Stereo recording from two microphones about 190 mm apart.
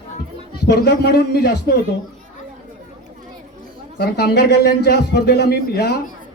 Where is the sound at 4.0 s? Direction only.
55° left (ahead or behind).